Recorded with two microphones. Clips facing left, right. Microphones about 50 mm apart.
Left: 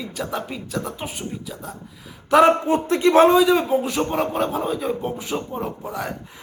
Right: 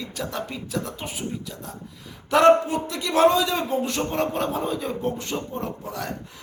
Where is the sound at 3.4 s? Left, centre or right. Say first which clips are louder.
Left 6 dB; centre.